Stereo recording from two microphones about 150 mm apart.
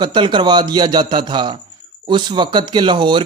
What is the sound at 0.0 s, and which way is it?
Speech, 30° right (ahead or behind).